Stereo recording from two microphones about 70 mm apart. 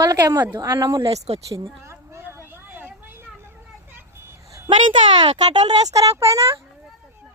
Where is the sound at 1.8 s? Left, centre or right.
Right.